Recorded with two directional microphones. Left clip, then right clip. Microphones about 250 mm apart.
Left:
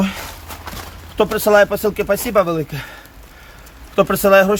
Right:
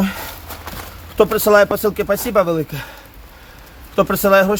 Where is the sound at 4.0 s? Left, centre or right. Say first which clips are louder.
Left 1 dB; centre.